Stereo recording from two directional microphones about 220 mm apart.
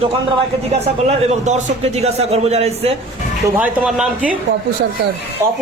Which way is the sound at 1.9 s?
30° right (ahead or behind).